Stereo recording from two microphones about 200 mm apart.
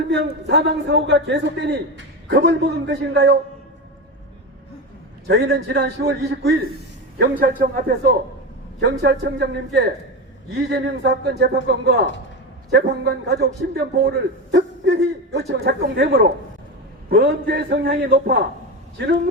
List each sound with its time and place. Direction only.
0.1 s a man's voice: 60° right (ahead or behind)
5.3 s a man's voice: 55° right (ahead or behind)
8.8 s a man's voice: 55° right (ahead or behind)